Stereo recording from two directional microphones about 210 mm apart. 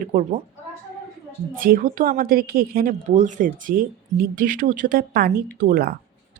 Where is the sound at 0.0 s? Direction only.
40° right (ahead or behind).